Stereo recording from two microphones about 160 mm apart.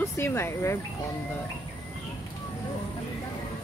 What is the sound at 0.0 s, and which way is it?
Speech, 15° left (ahead or behind).